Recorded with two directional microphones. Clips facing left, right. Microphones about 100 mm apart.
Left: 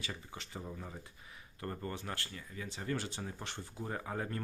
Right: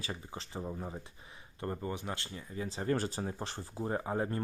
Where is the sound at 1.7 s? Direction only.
15° right (ahead or behind).